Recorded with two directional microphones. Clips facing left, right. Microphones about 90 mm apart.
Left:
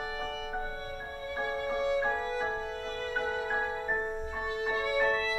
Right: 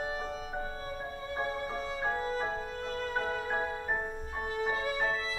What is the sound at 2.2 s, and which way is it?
Violin, 40° right (ahead or behind).